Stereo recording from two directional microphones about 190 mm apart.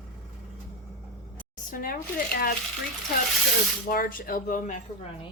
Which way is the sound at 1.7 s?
50° left (ahead or behind).